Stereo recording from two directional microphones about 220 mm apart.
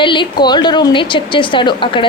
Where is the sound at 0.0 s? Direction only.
20° left (ahead or behind).